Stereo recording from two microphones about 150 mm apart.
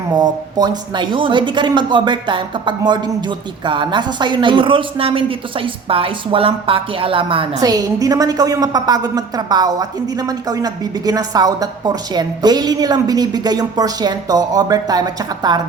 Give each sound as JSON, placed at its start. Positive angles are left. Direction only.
{"t": 0.1, "sound": "speech", "side_deg": -25}
{"t": 7.6, "sound": "a woman's voice", "side_deg": -25}